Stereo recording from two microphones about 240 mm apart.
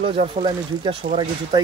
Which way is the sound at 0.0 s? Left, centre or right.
Right.